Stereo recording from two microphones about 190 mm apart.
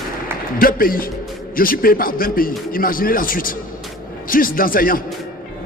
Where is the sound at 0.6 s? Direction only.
50° left (ahead or behind).